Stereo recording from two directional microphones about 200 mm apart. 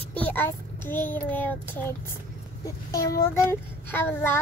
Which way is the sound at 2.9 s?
15° left (ahead or behind).